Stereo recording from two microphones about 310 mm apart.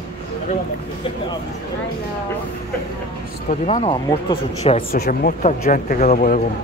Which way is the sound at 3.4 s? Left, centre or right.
Left.